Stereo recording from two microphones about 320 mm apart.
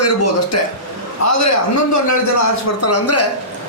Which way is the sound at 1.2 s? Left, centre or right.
Left.